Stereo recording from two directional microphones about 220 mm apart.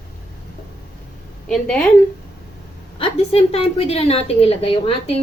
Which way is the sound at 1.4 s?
5° left (ahead or behind).